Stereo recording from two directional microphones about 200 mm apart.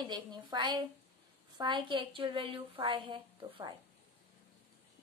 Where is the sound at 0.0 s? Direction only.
20° right (ahead or behind).